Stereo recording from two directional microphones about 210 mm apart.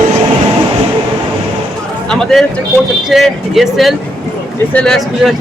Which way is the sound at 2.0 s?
Centre (ahead or behind).